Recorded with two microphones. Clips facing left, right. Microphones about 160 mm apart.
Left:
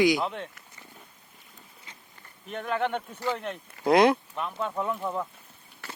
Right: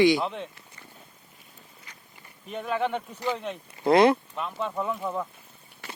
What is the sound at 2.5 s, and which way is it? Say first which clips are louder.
Speech: right 1 dB; 5° right (ahead or behind).